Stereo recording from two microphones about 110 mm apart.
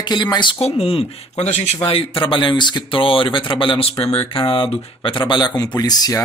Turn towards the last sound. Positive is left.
turn(degrees=35)  # may be behind; listen again after turning